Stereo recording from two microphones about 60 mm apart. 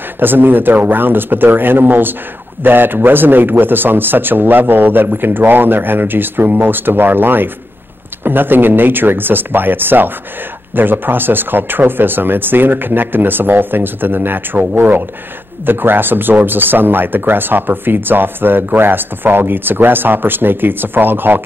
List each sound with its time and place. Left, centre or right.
0.2 s speech: right